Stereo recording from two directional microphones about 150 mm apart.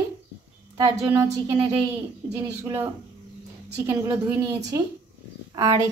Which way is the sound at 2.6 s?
15° right (ahead or behind).